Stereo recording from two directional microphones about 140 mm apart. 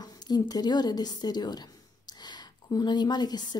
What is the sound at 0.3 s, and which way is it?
A woman's voice, 30° left (ahead or behind).